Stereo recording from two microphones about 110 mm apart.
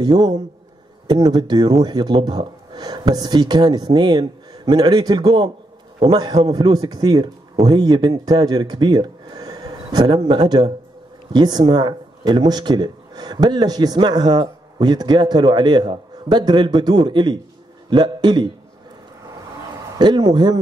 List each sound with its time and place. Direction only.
0.0 s a man's voice: 40° right (ahead or behind)
6.7 s a man's voice: 35° right (ahead or behind)
20.0 s a man's voice: 40° right (ahead or behind)